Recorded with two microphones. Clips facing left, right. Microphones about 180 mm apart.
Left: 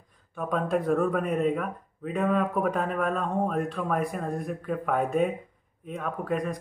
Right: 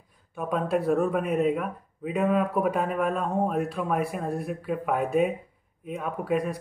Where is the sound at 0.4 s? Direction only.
5° right (ahead or behind).